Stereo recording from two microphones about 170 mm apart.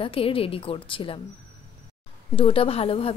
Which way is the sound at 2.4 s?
30° left (ahead or behind).